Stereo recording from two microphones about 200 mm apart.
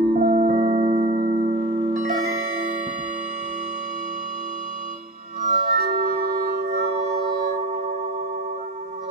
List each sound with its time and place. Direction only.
0.0 s music: 35° right (ahead or behind)
5.6 s music: 50° right (ahead or behind)